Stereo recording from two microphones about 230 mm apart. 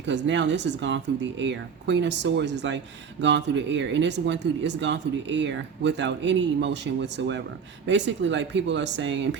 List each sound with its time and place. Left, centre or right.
0.0 s speech: right